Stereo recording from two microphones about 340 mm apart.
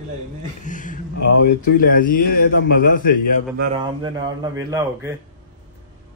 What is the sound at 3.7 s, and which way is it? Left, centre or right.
A man's voice, centre.